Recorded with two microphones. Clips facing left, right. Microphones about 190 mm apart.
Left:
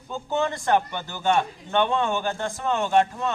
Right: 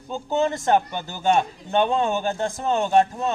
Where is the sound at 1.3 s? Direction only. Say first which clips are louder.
Right 2 dB; 30° right (ahead or behind).